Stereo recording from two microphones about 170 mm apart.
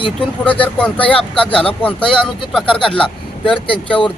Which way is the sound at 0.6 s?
10° left (ahead or behind).